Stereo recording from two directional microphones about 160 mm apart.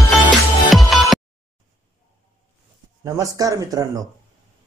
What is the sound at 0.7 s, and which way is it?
Music, centre (ahead or behind).